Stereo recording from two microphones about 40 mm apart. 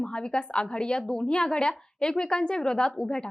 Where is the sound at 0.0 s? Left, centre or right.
Left.